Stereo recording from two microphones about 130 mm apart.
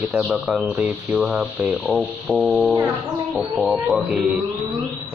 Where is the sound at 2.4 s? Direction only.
20° right (ahead or behind).